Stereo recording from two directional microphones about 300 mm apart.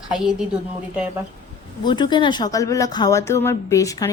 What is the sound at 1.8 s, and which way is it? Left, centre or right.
Speech, centre.